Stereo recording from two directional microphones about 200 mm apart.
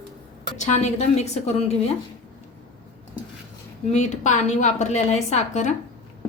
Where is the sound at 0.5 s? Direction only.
35° left (ahead or behind).